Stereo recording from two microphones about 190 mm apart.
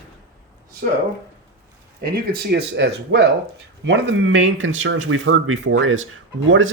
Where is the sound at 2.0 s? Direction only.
55° right (ahead or behind).